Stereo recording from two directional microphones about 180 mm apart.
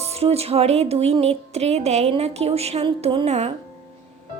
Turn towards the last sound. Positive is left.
turn(degrees=-35)  # may be behind; listen again after turning